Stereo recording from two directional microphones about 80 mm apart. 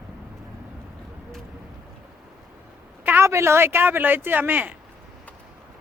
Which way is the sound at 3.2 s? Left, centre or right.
Right.